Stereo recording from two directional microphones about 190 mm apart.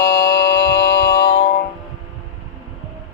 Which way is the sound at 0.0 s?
50° left (ahead or behind).